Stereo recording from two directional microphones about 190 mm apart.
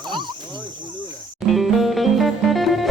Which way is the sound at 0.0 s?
25° right (ahead or behind).